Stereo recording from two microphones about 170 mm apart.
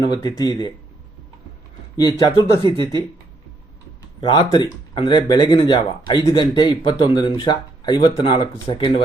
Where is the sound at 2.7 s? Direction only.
30° right (ahead or behind).